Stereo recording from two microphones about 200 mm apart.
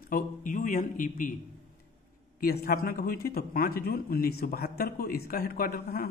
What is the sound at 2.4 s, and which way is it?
Speech, 50° left (ahead or behind).